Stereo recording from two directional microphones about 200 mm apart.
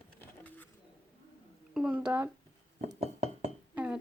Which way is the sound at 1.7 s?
5° right (ahead or behind).